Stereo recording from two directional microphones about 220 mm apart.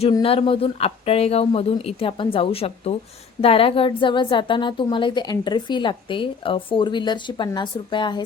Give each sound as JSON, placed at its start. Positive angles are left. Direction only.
{"t": 0.0, "sound": "a woman's voice", "side_deg": 25}